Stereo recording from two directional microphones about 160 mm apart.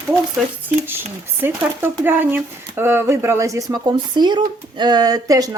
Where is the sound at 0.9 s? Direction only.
15° right (ahead or behind).